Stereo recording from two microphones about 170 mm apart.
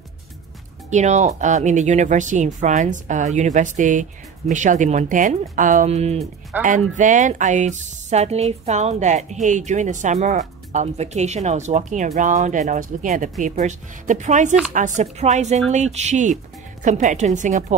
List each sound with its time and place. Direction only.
0.8 s speech: 45° right (ahead or behind)